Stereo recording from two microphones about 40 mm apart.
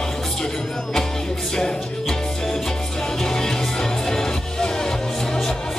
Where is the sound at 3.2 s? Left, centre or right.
Centre.